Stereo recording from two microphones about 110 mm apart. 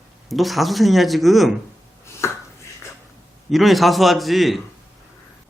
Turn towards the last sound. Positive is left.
turn(degrees=0)  # may be behind; listen again after turning